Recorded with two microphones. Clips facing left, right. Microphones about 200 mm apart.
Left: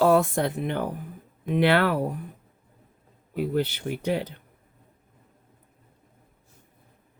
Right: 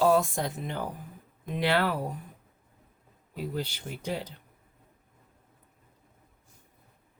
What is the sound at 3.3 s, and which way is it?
Speech, 65° left (ahead or behind).